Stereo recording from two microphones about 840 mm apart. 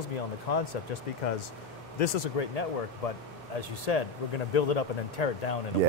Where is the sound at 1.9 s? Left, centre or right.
Left.